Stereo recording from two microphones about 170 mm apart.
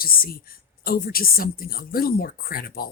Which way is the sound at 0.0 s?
60° left (ahead or behind).